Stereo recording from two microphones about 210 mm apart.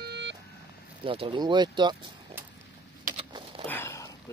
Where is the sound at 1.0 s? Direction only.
25° right (ahead or behind).